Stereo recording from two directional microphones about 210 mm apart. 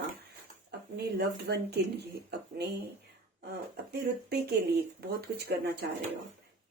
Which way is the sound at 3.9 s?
50° right (ahead or behind).